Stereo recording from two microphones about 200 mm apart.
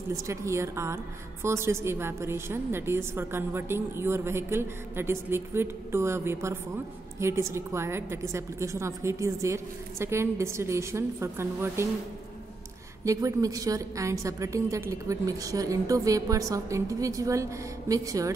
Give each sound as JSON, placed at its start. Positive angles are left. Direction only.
{"t": 0.1, "sound": "a woman's voice", "side_deg": -15}
{"t": 13.0, "sound": "a woman's voice", "side_deg": -15}